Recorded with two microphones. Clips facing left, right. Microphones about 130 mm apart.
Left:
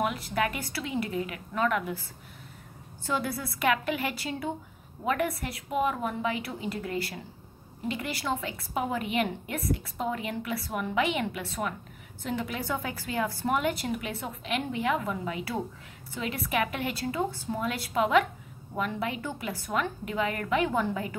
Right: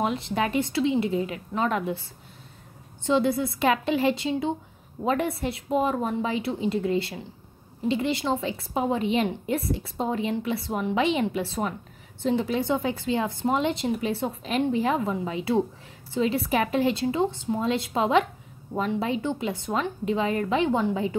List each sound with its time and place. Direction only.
0.0 s a woman's voice: 25° right (ahead or behind)